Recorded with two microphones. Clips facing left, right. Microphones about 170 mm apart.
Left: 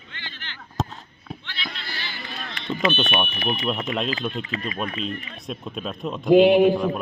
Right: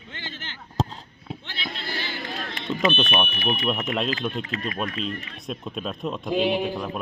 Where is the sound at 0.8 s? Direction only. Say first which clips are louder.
Right 1 dB; 30° right (ahead or behind).